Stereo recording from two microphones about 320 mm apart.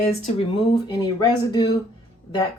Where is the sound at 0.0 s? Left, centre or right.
Centre.